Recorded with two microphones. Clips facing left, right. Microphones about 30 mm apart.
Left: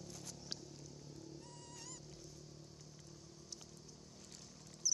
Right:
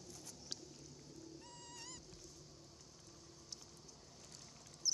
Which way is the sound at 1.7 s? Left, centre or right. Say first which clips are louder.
Right 1 dB; right.